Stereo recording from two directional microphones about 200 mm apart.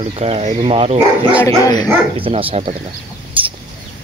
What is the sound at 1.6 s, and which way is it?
Speech, 20° left (ahead or behind).